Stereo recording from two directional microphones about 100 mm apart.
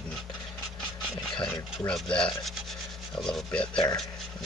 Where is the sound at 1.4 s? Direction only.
5° left (ahead or behind).